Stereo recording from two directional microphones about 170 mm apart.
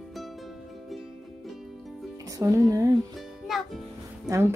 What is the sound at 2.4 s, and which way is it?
Speech, 20° right (ahead or behind).